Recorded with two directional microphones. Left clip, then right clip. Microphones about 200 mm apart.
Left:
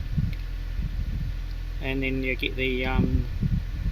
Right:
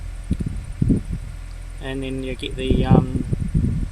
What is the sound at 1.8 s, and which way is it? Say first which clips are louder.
Speech: even; 15° right (ahead or behind).